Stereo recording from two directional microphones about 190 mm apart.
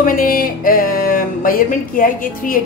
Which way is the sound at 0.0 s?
50° left (ahead or behind).